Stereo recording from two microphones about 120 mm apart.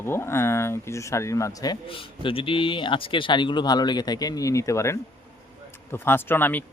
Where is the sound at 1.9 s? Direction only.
50° left (ahead or behind).